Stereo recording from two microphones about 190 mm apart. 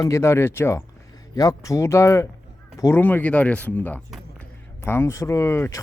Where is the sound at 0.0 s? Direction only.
15° left (ahead or behind).